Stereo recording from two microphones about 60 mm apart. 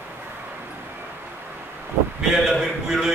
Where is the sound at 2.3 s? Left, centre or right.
Centre.